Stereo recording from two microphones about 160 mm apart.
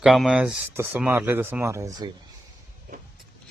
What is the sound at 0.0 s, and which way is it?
Speech, centre (ahead or behind).